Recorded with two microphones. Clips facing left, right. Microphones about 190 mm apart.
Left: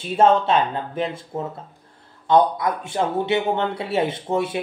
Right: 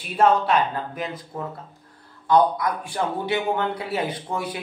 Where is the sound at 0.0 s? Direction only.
25° left (ahead or behind).